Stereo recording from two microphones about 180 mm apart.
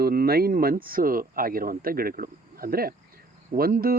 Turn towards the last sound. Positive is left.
turn(degrees=-55)  # may be behind; listen again after turning